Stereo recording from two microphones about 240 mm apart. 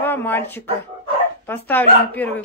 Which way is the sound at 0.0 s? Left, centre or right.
Centre.